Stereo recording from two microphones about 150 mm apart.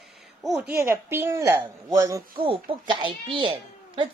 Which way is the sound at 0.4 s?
Centre (ahead or behind).